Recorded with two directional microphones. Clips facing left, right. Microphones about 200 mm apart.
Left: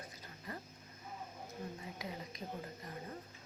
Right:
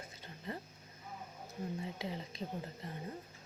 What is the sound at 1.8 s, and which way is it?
Speech, 30° right (ahead or behind).